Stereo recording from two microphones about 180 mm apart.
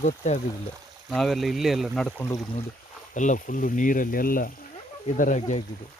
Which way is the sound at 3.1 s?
45° left (ahead or behind).